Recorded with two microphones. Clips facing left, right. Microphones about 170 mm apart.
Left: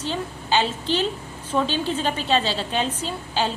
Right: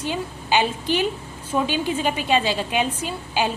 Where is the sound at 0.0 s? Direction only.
15° right (ahead or behind).